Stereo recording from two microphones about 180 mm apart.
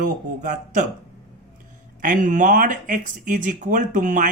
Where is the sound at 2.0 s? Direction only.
45° right (ahead or behind).